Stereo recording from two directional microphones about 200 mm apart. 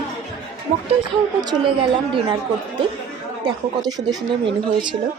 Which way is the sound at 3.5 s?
20° right (ahead or behind).